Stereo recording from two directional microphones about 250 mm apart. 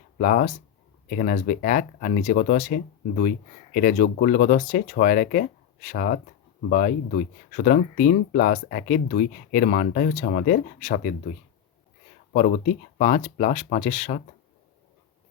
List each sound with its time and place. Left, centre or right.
0.2 s speech: left
3.8 s speech: left
12.3 s speech: left